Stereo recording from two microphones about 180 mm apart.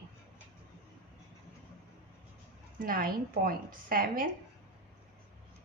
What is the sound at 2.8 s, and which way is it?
A woman's voice, 50° right (ahead or behind).